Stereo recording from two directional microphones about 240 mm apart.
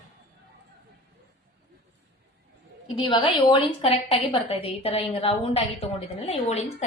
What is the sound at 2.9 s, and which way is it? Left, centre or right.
A woman's voice, left.